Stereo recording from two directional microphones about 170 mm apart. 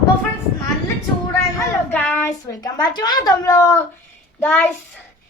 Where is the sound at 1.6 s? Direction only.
10° left (ahead or behind).